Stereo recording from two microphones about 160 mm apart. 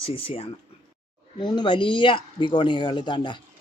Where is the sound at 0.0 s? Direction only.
35° left (ahead or behind).